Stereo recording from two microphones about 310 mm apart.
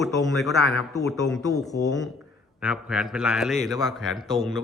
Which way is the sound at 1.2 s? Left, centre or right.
Left.